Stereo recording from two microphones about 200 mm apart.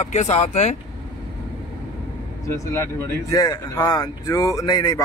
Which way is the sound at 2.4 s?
15° left (ahead or behind).